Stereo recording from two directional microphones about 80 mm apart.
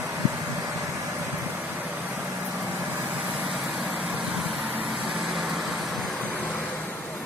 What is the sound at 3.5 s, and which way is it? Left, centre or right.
Vehicle, centre.